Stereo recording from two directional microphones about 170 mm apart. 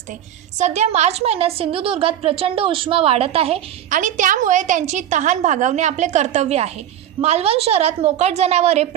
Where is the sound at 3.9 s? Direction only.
50° right (ahead or behind).